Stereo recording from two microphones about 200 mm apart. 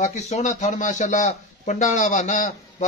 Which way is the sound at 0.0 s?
35° left (ahead or behind).